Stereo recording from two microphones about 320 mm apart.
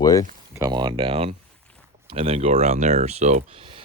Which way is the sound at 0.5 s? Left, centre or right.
Centre.